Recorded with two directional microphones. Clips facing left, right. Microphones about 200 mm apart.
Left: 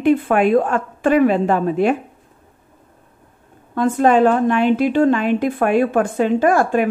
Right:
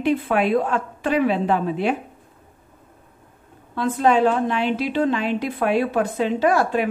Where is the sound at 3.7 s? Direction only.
50° left (ahead or behind).